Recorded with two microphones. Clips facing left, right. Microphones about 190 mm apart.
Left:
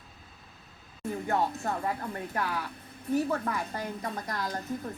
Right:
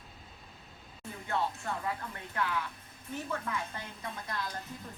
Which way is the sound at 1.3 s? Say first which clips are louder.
Left 4 dB; 40° left (ahead or behind).